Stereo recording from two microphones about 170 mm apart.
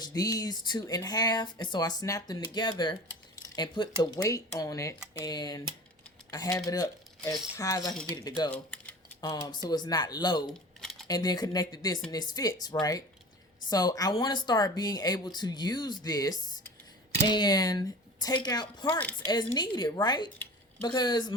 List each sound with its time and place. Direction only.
0.0 s speech: 20° left (ahead or behind)
8.4 s speech: 5° left (ahead or behind)
9.2 s speech: 20° left (ahead or behind)
10.5 s a sound: centre (ahead or behind)
11.1 s speech: 25° left (ahead or behind)
18.9 s speech: 10° left (ahead or behind)
19.3 s speech: 25° left (ahead or behind)